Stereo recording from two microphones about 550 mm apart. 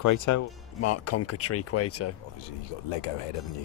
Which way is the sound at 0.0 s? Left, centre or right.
Left.